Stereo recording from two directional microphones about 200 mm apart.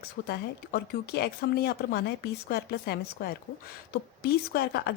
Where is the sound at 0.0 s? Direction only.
50° left (ahead or behind).